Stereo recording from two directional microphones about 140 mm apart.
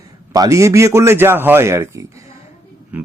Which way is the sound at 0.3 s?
25° right (ahead or behind).